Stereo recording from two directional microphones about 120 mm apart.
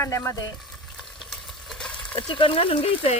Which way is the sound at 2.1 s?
45° left (ahead or behind).